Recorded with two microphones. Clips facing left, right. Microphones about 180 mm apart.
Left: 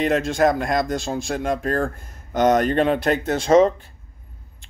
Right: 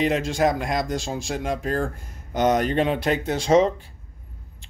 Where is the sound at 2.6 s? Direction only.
50° left (ahead or behind).